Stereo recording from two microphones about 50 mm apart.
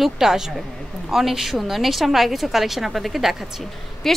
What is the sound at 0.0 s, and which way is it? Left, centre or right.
A woman's voice, centre.